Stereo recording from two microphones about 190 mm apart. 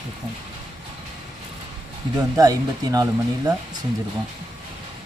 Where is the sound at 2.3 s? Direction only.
20° right (ahead or behind).